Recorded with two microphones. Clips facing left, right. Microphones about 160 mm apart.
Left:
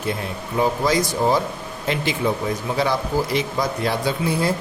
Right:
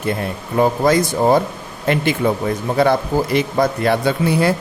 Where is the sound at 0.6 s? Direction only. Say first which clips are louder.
Right 5 dB; 55° right (ahead or behind).